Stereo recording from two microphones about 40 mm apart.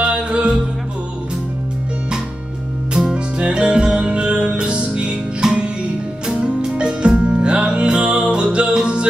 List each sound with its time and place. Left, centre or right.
0.0 s music: right
2.9 s music: centre
5.4 s music: centre